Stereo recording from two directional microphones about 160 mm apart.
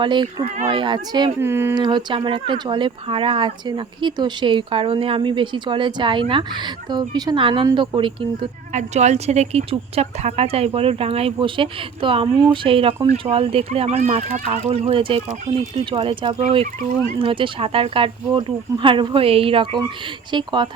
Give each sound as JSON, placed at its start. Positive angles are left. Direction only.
{"t": 0.0, "sound": "speech", "side_deg": -30}
{"t": 1.4, "sound": "speech", "side_deg": -15}
{"t": 1.7, "sound": "speech", "side_deg": -25}
{"t": 8.7, "sound": "speech", "side_deg": -45}